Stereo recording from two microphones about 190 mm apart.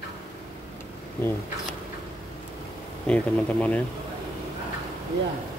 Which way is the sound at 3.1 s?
5° left (ahead or behind).